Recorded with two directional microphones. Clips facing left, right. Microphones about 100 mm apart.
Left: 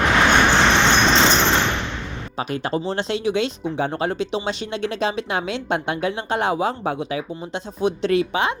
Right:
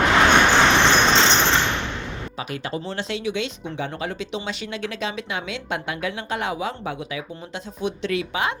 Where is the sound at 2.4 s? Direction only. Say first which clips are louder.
Left 7 dB; 35° left (ahead or behind).